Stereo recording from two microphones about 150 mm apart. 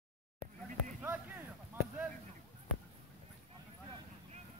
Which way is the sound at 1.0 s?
10° right (ahead or behind).